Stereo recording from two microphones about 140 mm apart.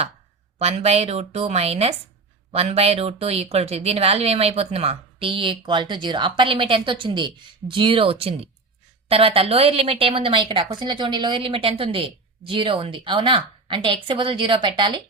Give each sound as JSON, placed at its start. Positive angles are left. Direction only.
{"t": 0.6, "sound": "a woman's voice", "side_deg": -45}